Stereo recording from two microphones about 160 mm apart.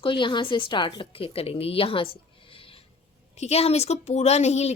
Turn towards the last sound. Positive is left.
turn(degrees=45)  # may be behind; listen again after turning